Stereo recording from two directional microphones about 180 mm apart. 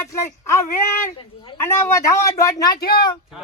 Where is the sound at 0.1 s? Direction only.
15° left (ahead or behind).